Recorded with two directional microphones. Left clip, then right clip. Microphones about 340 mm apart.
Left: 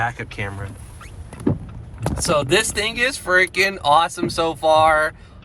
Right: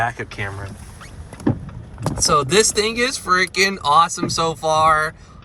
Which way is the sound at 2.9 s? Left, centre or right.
Left.